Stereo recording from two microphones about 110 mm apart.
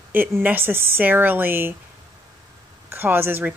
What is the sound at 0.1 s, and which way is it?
Speech, 15° right (ahead or behind).